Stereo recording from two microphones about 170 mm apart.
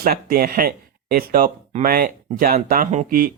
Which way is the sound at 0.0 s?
60° right (ahead or behind).